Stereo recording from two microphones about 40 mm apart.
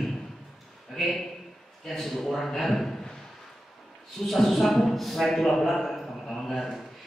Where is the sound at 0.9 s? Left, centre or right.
Centre.